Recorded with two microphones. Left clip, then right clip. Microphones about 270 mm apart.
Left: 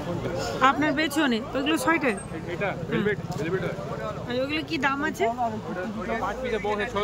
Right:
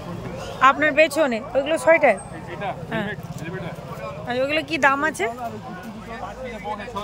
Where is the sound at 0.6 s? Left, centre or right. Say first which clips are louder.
Right 7 dB; centre.